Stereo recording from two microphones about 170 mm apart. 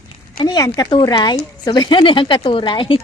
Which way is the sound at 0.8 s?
25° left (ahead or behind).